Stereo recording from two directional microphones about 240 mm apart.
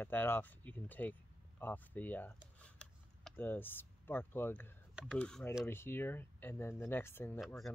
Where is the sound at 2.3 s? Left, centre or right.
Centre.